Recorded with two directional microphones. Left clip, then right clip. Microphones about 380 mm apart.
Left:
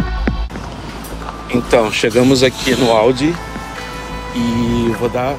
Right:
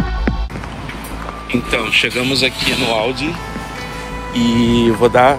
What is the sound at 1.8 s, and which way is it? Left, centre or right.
Speech, centre.